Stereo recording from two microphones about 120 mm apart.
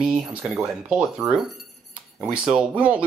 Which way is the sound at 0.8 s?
5° right (ahead or behind).